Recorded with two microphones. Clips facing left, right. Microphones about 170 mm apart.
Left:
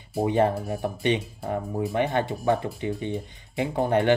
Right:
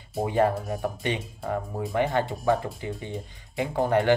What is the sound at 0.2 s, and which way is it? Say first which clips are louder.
Speech: left 1 dB; 25° left (ahead or behind).